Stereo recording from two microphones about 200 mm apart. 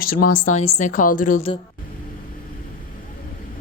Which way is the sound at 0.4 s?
35° left (ahead or behind).